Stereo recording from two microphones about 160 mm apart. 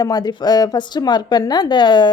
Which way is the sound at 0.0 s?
25° left (ahead or behind).